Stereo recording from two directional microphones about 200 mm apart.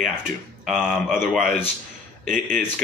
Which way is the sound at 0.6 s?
5° right (ahead or behind).